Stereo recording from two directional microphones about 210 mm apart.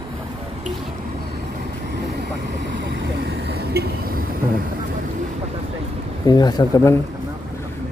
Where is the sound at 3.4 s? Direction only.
50° right (ahead or behind).